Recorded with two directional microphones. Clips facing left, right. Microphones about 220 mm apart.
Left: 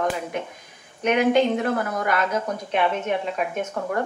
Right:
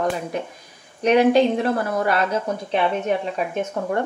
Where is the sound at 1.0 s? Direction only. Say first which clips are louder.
Right 4 dB; 35° right (ahead or behind).